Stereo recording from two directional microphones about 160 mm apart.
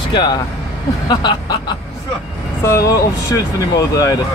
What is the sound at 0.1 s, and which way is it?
Speech, 30° left (ahead or behind).